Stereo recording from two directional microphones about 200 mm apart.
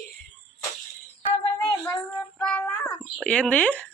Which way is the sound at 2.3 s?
5° left (ahead or behind).